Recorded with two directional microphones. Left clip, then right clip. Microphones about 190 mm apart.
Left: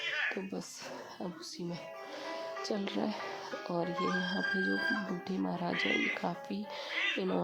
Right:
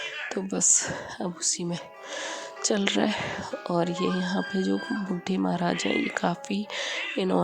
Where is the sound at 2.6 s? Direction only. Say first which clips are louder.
Right 13 dB; 30° right (ahead or behind).